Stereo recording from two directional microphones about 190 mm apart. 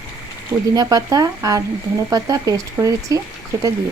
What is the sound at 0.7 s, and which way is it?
Speech, 20° right (ahead or behind).